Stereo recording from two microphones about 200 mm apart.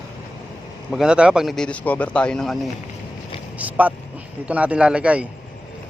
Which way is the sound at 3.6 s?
5° right (ahead or behind).